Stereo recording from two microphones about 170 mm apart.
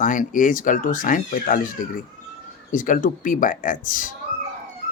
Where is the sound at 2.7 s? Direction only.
50° left (ahead or behind).